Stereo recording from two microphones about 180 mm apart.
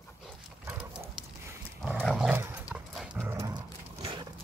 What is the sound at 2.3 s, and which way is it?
Dog, 10° right (ahead or behind).